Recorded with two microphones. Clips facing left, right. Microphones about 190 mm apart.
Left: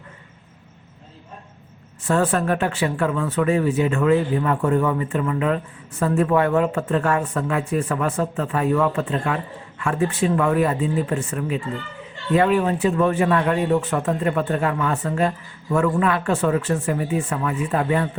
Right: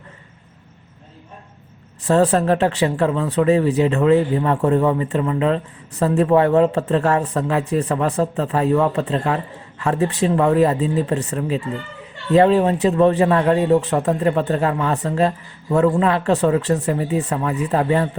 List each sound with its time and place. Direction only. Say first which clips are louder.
2.0 s speech: right 4 dB; 35° right (ahead or behind)